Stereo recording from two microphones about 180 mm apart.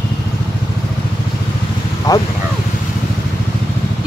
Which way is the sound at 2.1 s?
20° left (ahead or behind).